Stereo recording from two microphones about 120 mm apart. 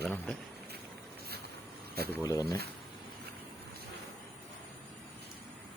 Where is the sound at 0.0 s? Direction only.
15° left (ahead or behind).